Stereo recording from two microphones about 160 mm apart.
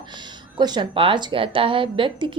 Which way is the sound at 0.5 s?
30° right (ahead or behind).